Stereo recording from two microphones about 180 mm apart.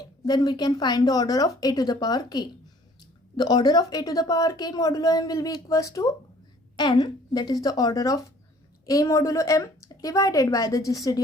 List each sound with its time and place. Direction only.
0.0 s a woman's voice: 25° left (ahead or behind)